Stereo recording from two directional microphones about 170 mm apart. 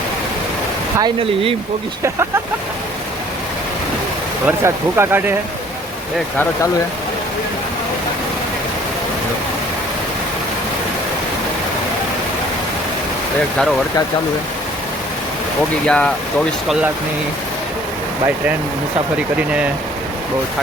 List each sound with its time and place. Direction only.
0.9 s speech: 30° right (ahead or behind)
4.4 s speech: 15° right (ahead or behind)
15.9 s speech: 5° left (ahead or behind)